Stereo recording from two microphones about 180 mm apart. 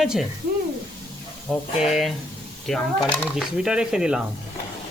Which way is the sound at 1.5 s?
Centre (ahead or behind).